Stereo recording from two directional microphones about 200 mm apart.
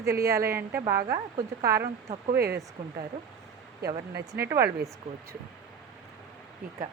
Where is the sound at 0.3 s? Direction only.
15° right (ahead or behind).